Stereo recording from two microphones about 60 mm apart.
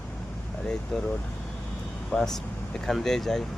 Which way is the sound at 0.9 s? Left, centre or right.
Centre.